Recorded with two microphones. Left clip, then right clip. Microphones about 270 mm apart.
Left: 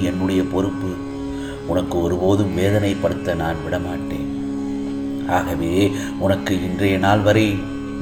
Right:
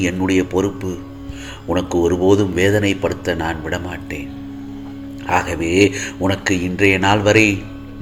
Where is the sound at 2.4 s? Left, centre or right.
Right.